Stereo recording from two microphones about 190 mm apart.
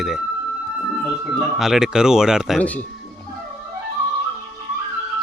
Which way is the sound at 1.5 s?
Centre (ahead or behind).